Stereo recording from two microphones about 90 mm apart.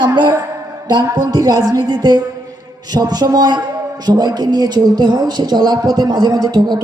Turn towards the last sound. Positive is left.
turn(degrees=-50)  # may be behind; listen again after turning